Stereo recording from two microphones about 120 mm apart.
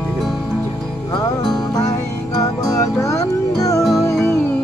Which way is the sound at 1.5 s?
30° left (ahead or behind).